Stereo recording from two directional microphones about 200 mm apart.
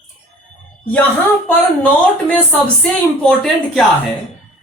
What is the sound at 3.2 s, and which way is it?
Speech, 5° left (ahead or behind).